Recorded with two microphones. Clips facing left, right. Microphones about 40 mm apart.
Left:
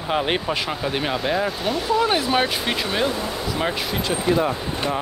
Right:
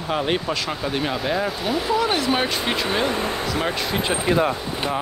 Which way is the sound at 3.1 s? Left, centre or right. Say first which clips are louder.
Right 2 dB; right.